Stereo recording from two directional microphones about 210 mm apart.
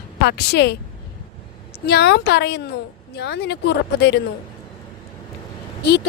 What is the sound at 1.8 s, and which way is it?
A woman's voice, 50° left (ahead or behind).